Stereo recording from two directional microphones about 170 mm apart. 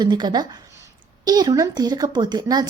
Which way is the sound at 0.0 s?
25° right (ahead or behind).